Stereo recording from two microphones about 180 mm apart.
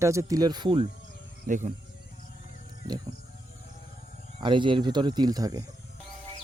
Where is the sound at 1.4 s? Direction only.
45° right (ahead or behind).